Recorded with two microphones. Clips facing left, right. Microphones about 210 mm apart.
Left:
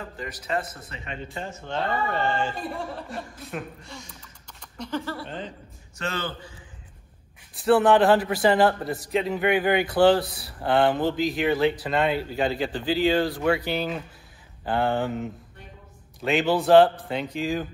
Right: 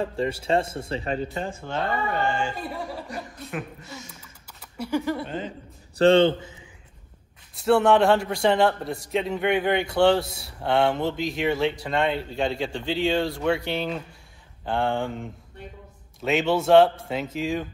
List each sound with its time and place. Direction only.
0.0 s speech: 30° right (ahead or behind)
2.3 s a man's voice: centre (ahead or behind)
4.1 s typing: 5° right (ahead or behind)
5.9 s speech: 30° right (ahead or behind)
7.5 s a man's voice: centre (ahead or behind)